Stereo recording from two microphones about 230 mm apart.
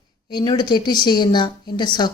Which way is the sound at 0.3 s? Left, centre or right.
Centre.